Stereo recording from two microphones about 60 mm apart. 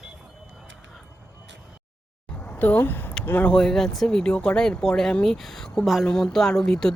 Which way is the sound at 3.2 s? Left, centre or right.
Left.